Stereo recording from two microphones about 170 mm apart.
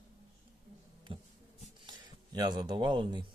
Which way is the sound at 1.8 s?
25° right (ahead or behind).